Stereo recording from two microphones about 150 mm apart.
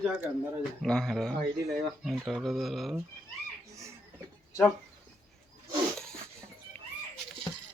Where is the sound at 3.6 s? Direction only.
20° right (ahead or behind).